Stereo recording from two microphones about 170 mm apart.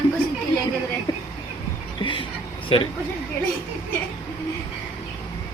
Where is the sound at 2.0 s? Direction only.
30° left (ahead or behind).